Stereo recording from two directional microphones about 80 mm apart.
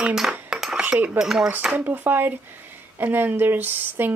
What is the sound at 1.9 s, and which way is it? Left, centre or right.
Speech, right.